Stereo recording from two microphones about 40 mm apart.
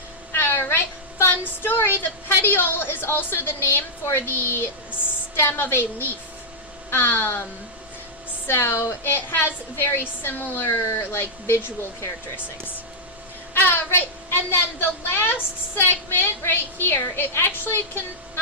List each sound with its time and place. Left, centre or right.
0.3 s a sound: left
2.4 s a woman's voice: left
6.9 s speech: left
8.4 s speech: left
9.3 s a woman's voice: left
10.0 s a woman's voice: left
13.5 s a sound: left
13.9 s a woman's voice: left